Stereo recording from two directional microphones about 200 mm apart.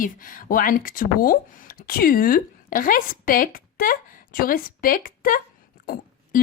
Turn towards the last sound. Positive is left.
turn(degrees=45)  # may be behind; listen again after turning